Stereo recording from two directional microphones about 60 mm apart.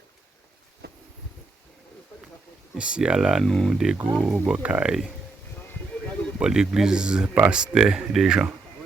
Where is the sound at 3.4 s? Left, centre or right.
Centre.